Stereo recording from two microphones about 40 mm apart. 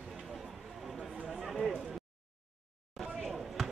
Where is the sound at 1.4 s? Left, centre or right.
Centre.